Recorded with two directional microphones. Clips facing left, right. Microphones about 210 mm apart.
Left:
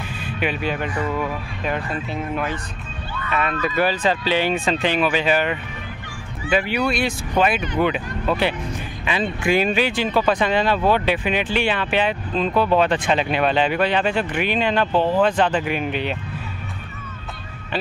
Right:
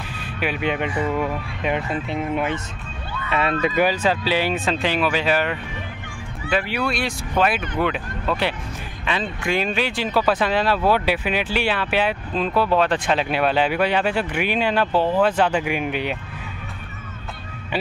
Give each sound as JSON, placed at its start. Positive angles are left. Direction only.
{"t": 0.6, "sound": "speech", "side_deg": -20}
{"t": 3.7, "sound": "speech", "side_deg": -10}